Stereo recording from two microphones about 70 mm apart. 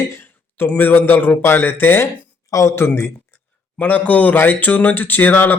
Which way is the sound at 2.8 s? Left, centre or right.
Left.